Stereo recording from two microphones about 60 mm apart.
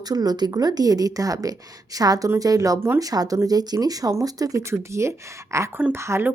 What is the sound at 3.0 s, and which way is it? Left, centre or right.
A woman's voice, right.